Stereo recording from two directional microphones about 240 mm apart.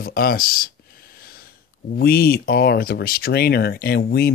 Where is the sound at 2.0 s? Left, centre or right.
Left.